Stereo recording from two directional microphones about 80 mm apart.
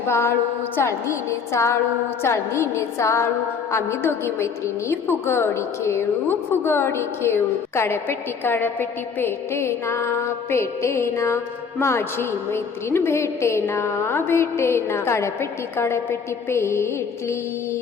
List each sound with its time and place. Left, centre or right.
0.1 s music: left